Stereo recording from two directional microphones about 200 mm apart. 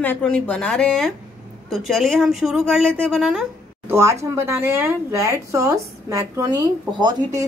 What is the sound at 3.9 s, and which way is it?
Speech, 15° right (ahead or behind).